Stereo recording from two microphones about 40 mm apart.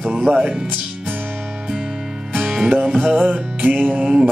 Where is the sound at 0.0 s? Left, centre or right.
Right.